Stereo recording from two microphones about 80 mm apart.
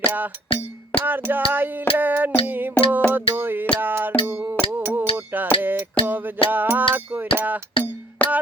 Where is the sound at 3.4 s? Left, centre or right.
Right.